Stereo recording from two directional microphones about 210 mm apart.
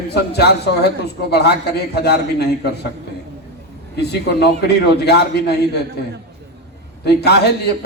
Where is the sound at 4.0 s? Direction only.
50° left (ahead or behind).